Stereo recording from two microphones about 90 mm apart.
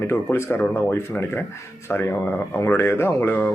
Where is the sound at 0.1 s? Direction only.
30° left (ahead or behind).